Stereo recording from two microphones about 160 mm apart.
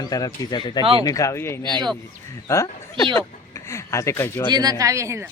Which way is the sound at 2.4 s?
20° left (ahead or behind).